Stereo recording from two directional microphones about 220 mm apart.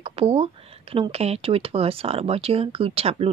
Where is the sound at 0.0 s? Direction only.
25° right (ahead or behind).